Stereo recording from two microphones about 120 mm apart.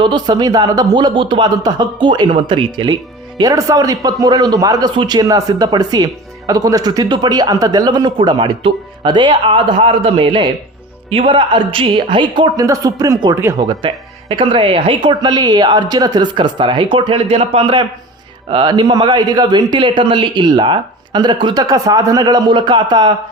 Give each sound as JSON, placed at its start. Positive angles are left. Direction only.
{"t": 0.0, "sound": "speech", "side_deg": -40}
{"t": 3.3, "sound": "a woman's voice", "side_deg": -30}
{"t": 12.5, "sound": "speech", "side_deg": -30}
{"t": 13.3, "sound": "speech", "side_deg": -20}
{"t": 13.6, "sound": "speech", "side_deg": -40}